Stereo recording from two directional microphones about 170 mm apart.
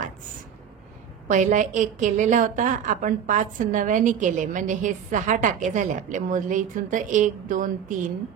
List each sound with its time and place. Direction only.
1.2 s a woman's voice: 45° right (ahead or behind)